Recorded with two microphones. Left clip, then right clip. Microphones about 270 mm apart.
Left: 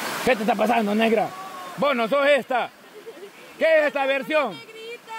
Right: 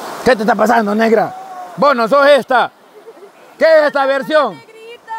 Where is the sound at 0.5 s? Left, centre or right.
Right.